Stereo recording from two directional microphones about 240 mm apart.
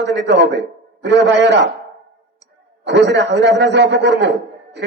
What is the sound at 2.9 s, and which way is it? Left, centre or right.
A man's voice, right.